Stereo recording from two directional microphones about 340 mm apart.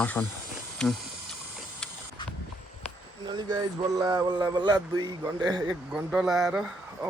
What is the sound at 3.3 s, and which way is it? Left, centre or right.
A man's voice, centre.